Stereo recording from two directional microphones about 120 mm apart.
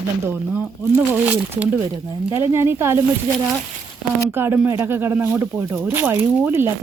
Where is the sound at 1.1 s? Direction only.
15° right (ahead or behind).